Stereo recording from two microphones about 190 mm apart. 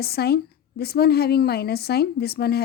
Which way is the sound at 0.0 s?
55° left (ahead or behind).